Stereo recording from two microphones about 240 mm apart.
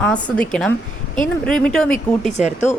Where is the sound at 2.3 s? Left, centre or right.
Left.